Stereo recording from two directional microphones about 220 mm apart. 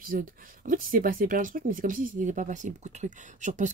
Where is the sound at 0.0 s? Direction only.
40° right (ahead or behind).